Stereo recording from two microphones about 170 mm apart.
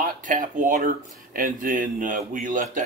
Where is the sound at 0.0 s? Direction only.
50° right (ahead or behind).